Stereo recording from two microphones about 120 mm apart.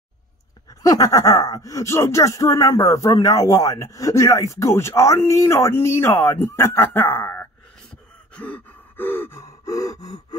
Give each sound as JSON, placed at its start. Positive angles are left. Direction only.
{"t": 0.8, "sound": "speech", "side_deg": 30}
{"t": 8.4, "sound": "gasp", "side_deg": 15}